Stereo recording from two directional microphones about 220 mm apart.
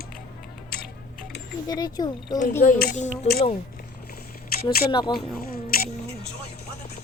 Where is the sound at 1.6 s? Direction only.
15° left (ahead or behind).